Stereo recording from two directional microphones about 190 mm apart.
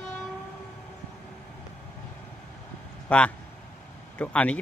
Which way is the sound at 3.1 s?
10° left (ahead or behind).